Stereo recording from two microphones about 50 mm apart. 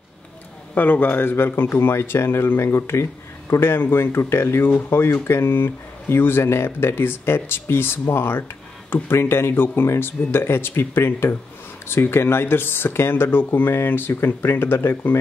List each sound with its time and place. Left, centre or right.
0.7 s speech: left